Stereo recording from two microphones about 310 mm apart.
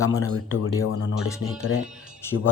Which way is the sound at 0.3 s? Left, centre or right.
Left.